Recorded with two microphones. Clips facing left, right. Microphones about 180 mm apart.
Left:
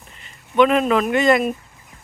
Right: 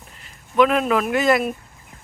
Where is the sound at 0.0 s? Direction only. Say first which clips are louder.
Even; centre (ahead or behind).